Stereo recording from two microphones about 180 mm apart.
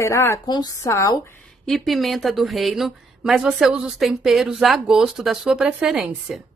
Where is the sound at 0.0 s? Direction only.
15° left (ahead or behind).